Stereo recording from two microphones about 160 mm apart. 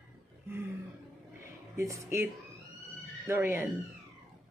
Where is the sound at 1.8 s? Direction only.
20° right (ahead or behind).